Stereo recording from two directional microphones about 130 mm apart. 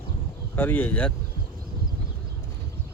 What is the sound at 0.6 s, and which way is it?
Speech, 15° left (ahead or behind).